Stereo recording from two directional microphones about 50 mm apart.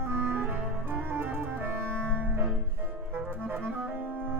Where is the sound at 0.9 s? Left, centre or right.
Right.